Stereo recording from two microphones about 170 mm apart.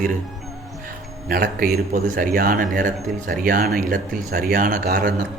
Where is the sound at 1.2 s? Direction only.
60° right (ahead or behind).